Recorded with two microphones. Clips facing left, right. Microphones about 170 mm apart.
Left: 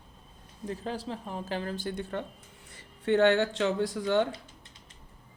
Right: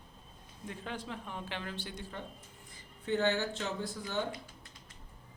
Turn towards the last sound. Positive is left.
turn(degrees=85)